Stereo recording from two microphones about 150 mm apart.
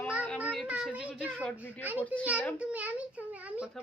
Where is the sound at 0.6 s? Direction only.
5° right (ahead or behind).